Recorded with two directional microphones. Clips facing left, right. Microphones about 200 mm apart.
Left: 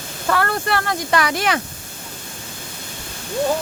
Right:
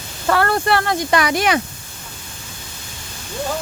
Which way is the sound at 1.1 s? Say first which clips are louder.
Right 2 dB; 15° right (ahead or behind).